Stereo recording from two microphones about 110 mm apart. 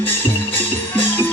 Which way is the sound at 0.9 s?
15° left (ahead or behind).